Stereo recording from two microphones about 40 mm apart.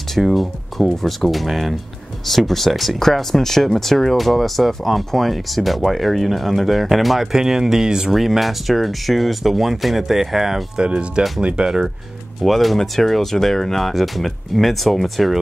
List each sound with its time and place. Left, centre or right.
0.1 s speech: centre
8.1 s speech: centre
10.8 s speech: right
12.4 s speech: centre